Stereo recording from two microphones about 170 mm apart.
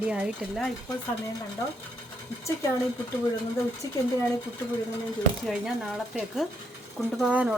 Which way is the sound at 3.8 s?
20° left (ahead or behind).